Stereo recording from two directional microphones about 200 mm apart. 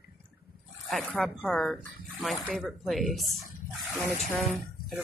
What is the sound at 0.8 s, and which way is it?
Speech, centre (ahead or behind).